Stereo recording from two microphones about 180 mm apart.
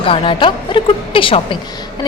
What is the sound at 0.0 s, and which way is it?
A woman's voice, 30° left (ahead or behind).